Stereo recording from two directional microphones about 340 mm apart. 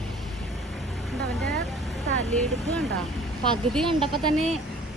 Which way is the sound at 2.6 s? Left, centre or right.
Centre.